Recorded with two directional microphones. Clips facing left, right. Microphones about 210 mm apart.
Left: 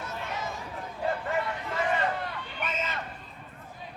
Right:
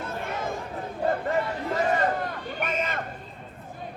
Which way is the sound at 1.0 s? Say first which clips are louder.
Right 4 dB; 40° right (ahead or behind).